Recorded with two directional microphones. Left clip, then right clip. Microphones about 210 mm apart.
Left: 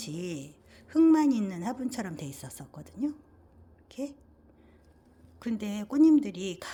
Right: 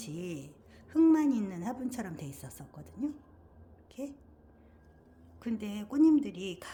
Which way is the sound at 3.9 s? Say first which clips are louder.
Left 4 dB; 20° left (ahead or behind).